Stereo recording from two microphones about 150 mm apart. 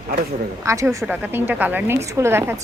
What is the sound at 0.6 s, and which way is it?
A woman's voice, 20° right (ahead or behind).